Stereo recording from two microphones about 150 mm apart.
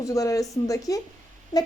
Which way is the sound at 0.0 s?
20° left (ahead or behind).